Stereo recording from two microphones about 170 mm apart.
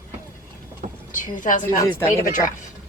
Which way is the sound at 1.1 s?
50° left (ahead or behind).